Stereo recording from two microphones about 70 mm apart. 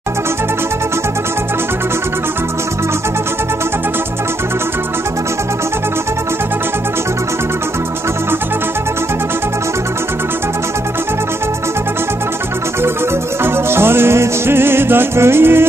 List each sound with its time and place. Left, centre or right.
13.4 s music: right